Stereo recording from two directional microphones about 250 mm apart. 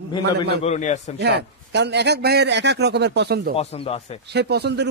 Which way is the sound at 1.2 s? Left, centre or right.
Right.